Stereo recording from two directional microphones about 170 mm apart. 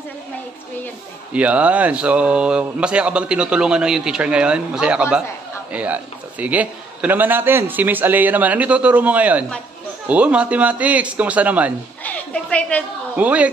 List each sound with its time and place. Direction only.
1.3 s speech: 10° right (ahead or behind)
12.0 s a sound: 10° left (ahead or behind)
13.1 s speech: 10° right (ahead or behind)